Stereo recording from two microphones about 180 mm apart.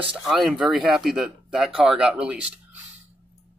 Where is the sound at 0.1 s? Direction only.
Centre (ahead or behind).